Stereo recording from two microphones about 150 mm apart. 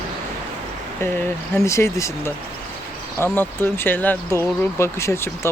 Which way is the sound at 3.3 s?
15° left (ahead or behind).